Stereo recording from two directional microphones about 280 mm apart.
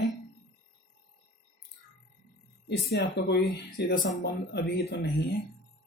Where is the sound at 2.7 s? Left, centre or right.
Left.